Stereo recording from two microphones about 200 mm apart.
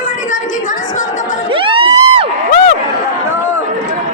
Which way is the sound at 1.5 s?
25° right (ahead or behind).